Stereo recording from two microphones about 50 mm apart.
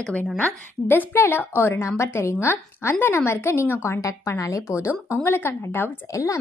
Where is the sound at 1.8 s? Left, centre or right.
Left.